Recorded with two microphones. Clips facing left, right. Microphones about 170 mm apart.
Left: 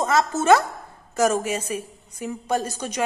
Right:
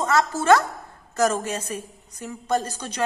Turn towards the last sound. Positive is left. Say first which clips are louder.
# even
turn(degrees=10)  # may be behind; listen again after turning